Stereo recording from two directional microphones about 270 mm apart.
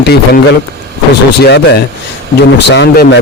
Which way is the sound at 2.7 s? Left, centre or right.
Left.